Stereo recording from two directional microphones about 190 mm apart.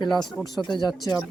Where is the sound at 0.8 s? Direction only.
20° left (ahead or behind).